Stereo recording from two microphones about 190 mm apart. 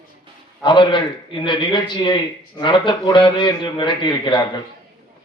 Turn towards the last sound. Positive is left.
turn(degrees=25)  # may be behind; listen again after turning